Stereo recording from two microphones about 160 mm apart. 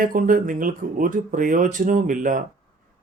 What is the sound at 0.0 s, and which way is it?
Speech, 60° right (ahead or behind).